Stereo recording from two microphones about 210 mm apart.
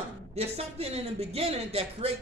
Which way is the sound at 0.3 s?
30° right (ahead or behind).